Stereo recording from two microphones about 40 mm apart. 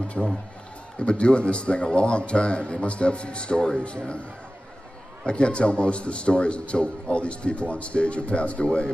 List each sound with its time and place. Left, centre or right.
0.2 s a man's voice: centre
0.9 s a man's voice: left
5.2 s a man's voice: left